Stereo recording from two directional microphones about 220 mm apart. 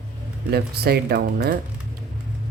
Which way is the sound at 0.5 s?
45° right (ahead or behind).